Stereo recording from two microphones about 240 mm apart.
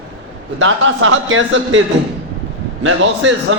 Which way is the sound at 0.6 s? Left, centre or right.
Right.